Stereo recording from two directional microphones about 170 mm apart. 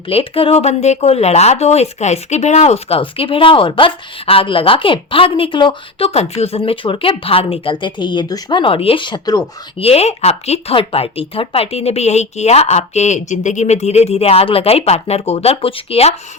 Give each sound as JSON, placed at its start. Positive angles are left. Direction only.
{"t": 0.1, "sound": "speech", "side_deg": 35}
{"t": 9.7, "sound": "speech", "side_deg": 35}